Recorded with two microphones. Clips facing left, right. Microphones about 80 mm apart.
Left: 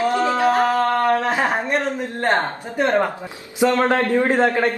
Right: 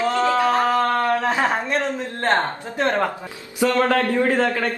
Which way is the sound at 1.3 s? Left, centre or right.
Centre.